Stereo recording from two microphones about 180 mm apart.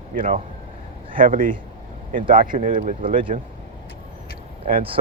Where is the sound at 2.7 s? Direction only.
30° right (ahead or behind).